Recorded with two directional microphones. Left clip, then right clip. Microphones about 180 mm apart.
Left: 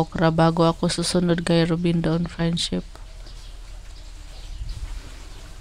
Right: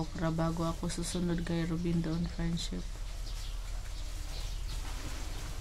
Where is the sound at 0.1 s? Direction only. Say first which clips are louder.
Left 15 dB; 55° left (ahead or behind).